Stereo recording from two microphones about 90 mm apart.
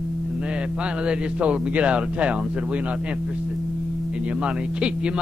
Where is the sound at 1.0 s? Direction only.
15° right (ahead or behind).